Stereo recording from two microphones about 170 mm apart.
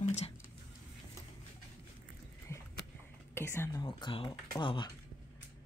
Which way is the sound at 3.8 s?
30° left (ahead or behind).